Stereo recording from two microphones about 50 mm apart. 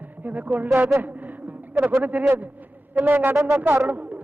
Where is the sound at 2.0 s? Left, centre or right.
Right.